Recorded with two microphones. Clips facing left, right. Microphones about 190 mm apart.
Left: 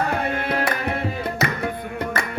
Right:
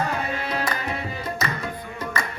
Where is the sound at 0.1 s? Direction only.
55° left (ahead or behind).